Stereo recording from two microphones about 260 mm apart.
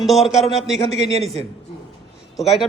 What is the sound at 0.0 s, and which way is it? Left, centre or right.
Speech, centre.